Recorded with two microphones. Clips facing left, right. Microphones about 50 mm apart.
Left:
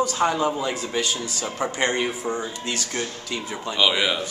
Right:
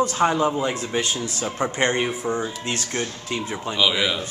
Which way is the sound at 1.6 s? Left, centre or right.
Centre.